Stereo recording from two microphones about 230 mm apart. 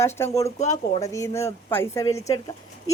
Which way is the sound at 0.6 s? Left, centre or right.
Left.